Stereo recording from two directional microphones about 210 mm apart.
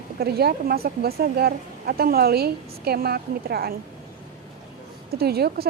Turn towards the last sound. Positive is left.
turn(degrees=-50)  # may be behind; listen again after turning